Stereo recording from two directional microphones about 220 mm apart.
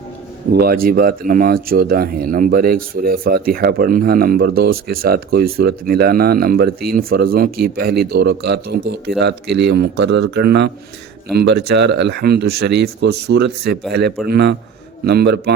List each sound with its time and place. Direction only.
0.5 s speech: 40° right (ahead or behind)